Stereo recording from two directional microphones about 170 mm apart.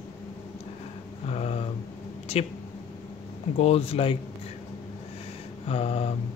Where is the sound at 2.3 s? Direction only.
40° left (ahead or behind).